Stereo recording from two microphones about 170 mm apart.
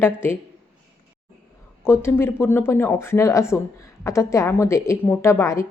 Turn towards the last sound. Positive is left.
turn(degrees=15)  # may be behind; listen again after turning